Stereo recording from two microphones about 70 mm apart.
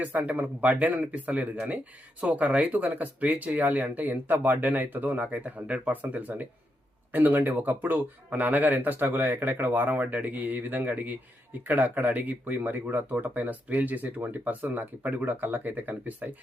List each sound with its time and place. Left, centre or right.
0.0 s speech: right